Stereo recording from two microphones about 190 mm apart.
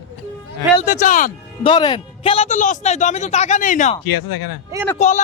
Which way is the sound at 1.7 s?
25° left (ahead or behind).